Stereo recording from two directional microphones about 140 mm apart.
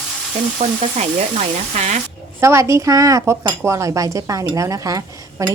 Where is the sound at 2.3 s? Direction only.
20° right (ahead or behind).